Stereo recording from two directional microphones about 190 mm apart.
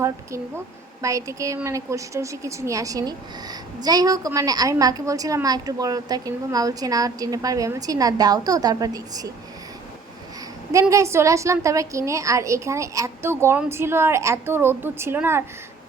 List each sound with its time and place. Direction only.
0.0 s a woman's voice: 15° right (ahead or behind)
10.7 s a woman's voice: 15° right (ahead or behind)